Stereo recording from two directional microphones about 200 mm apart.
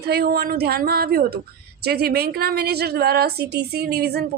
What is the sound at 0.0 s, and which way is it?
A woman's voice, 55° right (ahead or behind).